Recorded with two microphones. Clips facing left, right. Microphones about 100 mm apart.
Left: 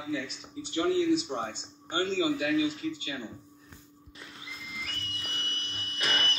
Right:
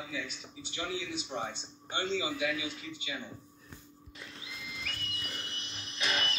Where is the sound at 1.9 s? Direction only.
45° left (ahead or behind).